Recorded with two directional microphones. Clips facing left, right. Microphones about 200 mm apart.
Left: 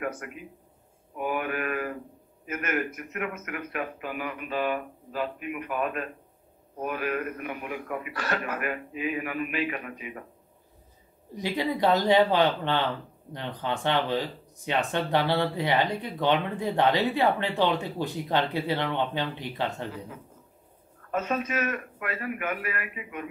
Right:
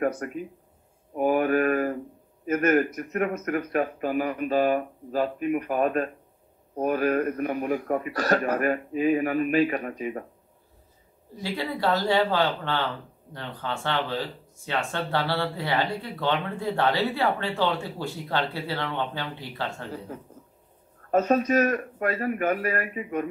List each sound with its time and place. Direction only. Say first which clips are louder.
0.0 s speech: right 7 dB; 40° right (ahead or behind)
11.3 s speech: left 2 dB; 15° left (ahead or behind)
21.1 s speech: right 8 dB; 40° right (ahead or behind)